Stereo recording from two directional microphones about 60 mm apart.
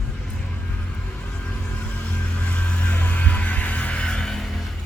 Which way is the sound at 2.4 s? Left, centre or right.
Left.